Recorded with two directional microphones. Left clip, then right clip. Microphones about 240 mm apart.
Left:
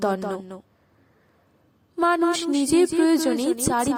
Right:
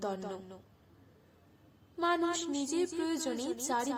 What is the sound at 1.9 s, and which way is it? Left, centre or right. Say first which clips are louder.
Speech: left 11 dB; left.